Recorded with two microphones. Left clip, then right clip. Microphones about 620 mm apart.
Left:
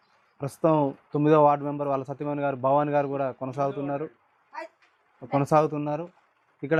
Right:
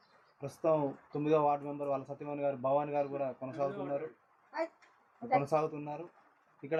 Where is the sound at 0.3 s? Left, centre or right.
Left.